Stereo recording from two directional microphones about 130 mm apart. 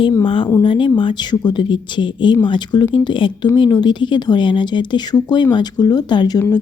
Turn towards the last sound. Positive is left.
turn(degrees=35)  # may be behind; listen again after turning